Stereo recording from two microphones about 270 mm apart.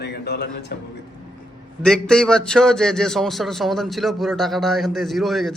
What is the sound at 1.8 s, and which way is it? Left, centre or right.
A man's voice, centre.